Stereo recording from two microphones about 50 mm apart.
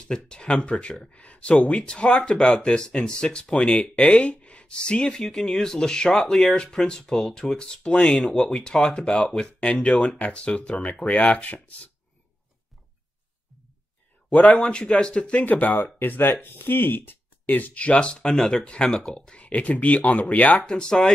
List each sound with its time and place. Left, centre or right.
0.1 s speech: centre
8.2 s speech: centre; by 11.9 s left
14.3 s speech: left
15.4 s speech: left; by 18.3 s centre
18.3 s speech: centre; by 20.6 s left
20.6 s speech: centre